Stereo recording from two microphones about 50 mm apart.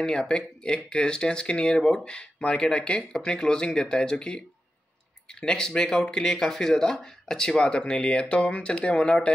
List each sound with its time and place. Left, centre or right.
0.0 s speech: centre